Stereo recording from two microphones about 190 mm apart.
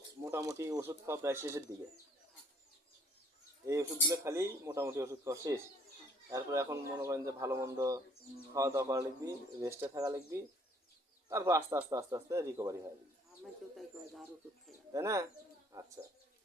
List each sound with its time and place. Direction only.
0.3 s speech: 15° right (ahead or behind)
4.1 s speech: 15° right (ahead or behind)
13.4 s speech: centre (ahead or behind)
14.9 s speech: 15° right (ahead or behind)